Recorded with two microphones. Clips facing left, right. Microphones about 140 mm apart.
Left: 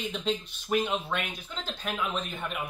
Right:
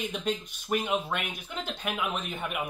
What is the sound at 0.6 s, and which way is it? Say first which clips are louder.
Speech: even; 10° right (ahead or behind).